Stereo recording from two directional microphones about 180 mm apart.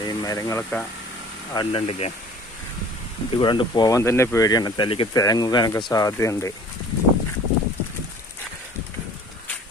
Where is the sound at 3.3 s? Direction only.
25° left (ahead or behind).